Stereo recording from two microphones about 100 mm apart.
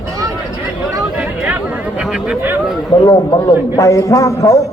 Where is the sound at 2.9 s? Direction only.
35° left (ahead or behind).